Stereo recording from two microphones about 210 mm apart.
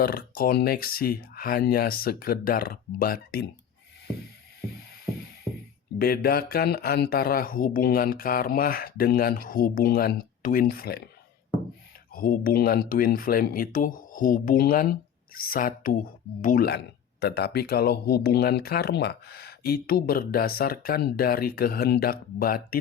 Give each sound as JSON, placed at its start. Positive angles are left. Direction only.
{"t": 0.0, "sound": "speech", "side_deg": 45}
{"t": 4.9, "sound": "music", "side_deg": 45}
{"t": 6.0, "sound": "speech", "side_deg": 45}
{"t": 12.1, "sound": "speech", "side_deg": 45}